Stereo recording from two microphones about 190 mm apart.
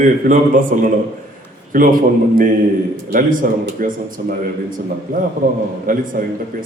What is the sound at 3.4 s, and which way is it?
A man's voice, 45° right (ahead or behind).